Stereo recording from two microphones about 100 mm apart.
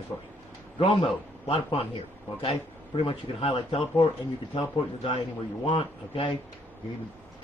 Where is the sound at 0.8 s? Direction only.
70° left (ahead or behind); by 4.0 s 85° left.